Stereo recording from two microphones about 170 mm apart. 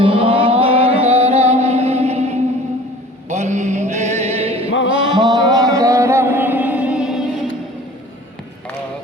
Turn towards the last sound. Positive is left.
turn(degrees=-5)  # may be behind; listen again after turning